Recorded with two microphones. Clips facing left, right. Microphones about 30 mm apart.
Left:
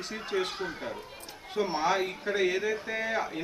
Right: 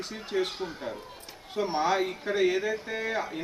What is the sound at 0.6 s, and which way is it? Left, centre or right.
Speech, centre.